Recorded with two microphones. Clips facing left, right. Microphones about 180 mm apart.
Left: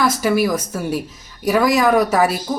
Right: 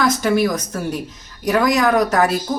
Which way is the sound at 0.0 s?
5° left (ahead or behind).